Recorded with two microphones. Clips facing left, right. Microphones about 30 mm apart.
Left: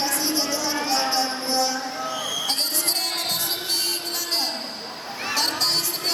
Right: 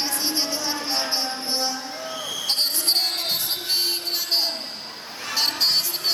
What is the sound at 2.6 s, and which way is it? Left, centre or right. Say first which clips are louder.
Basketball bounce: right 3 dB; right.